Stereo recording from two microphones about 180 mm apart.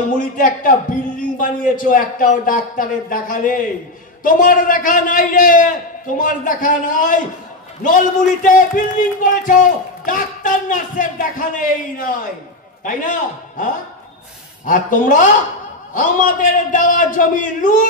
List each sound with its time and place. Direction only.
1.4 s speech: 50° left (ahead or behind)
14.7 s speech: 50° left (ahead or behind)